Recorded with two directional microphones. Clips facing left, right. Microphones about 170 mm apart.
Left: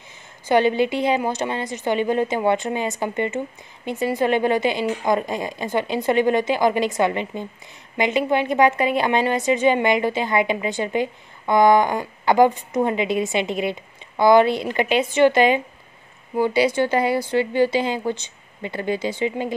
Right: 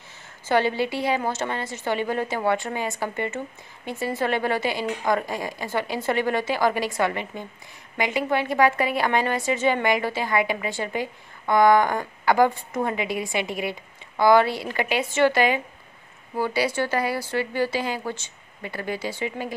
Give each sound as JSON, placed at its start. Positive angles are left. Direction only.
{"t": 0.5, "sound": "a woman's voice", "side_deg": 20}